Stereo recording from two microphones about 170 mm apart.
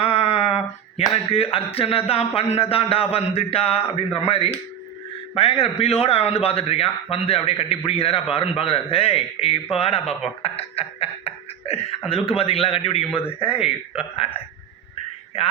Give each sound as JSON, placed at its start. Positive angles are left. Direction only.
{"t": 0.0, "sound": "a man's voice", "side_deg": 35}